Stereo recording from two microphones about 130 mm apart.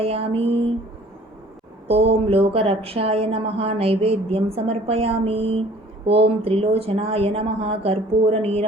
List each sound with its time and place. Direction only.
0.0 s speech: 50° right (ahead or behind)
1.9 s speech: 50° right (ahead or behind)